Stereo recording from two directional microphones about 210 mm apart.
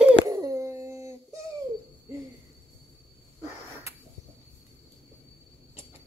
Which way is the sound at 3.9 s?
15° right (ahead or behind).